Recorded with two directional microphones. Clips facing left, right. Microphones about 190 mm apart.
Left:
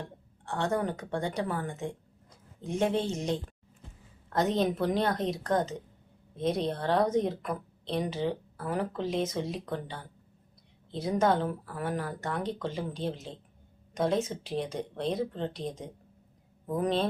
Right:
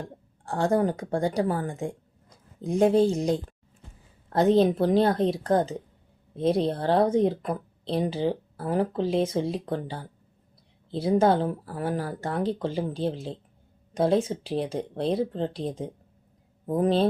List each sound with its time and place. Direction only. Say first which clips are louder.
0.4 s speech: right 6 dB; 35° right (ahead or behind)